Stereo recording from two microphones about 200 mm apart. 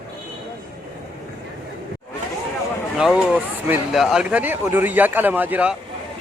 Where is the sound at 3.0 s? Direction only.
5° right (ahead or behind).